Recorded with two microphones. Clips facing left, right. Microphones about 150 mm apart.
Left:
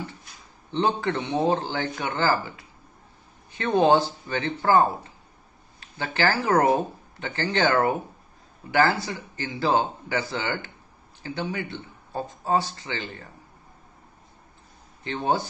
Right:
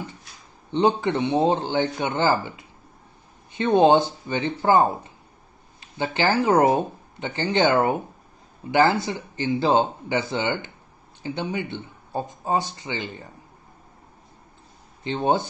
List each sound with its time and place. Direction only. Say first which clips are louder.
0.7 s speech: right 4 dB; 20° right (ahead or behind)
15.0 s speech: right 3 dB; 20° right (ahead or behind)